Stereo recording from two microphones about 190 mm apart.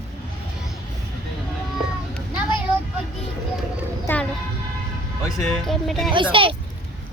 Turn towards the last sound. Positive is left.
turn(degrees=-25)  # may be behind; listen again after turning